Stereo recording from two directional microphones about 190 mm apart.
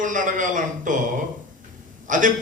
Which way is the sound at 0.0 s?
45° right (ahead or behind).